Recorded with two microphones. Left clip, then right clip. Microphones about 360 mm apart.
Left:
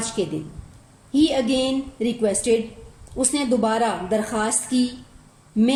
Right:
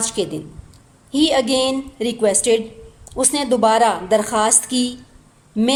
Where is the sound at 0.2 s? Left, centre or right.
Centre.